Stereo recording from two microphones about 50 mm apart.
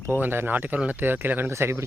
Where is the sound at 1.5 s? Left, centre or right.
Right.